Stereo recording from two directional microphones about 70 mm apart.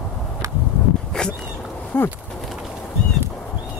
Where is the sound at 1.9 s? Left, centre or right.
Left.